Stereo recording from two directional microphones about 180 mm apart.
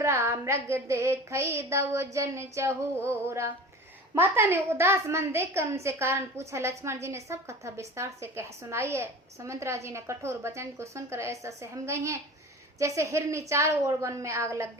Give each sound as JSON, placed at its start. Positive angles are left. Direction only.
{"t": 0.0, "sound": "a woman's voice", "side_deg": -15}